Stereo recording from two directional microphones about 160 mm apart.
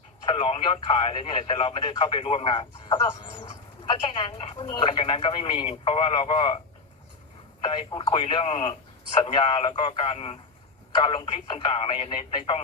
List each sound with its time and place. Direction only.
0.3 s speech: 35° left (ahead or behind)
4.6 s speech: 30° left (ahead or behind)
7.7 s speech: 35° left (ahead or behind)